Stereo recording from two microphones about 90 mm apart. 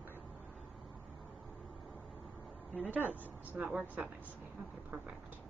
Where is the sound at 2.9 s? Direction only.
20° right (ahead or behind).